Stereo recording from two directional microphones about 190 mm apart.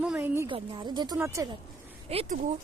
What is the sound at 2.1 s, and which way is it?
Speech, 35° right (ahead or behind).